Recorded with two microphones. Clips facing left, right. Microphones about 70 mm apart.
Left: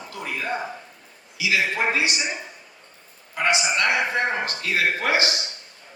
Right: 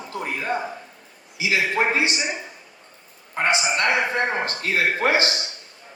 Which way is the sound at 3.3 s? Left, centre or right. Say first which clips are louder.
Right 1 dB; right.